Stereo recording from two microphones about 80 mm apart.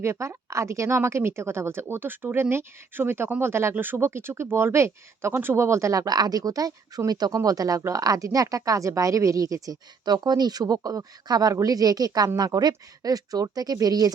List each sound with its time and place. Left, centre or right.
0.0 s speech: right